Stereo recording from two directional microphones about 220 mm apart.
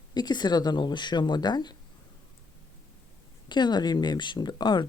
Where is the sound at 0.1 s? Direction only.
20° left (ahead or behind).